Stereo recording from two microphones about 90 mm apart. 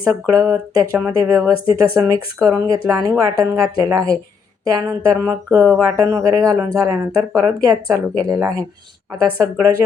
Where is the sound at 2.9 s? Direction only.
35° right (ahead or behind).